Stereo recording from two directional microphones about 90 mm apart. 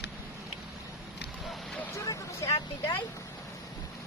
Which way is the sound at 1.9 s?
40° left (ahead or behind).